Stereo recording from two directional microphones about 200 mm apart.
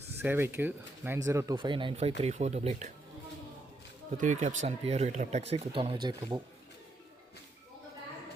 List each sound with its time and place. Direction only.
0.2 s speech: 10° right (ahead or behind); by 2.8 s 35° right (ahead or behind)
4.2 s speech: 40° right (ahead or behind); by 6.4 s 20° right (ahead or behind)